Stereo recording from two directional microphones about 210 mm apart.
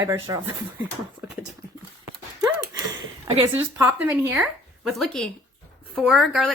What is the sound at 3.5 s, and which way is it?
Speech, 10° right (ahead or behind).